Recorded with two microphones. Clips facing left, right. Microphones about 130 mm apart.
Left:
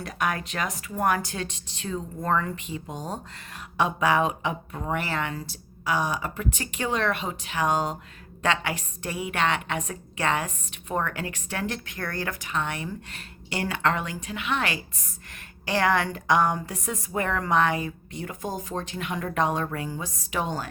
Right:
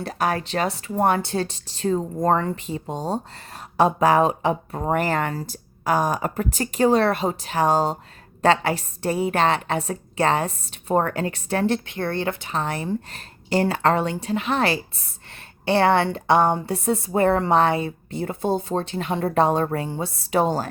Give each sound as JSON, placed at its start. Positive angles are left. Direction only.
{"t": 0.0, "sound": "speech", "side_deg": -35}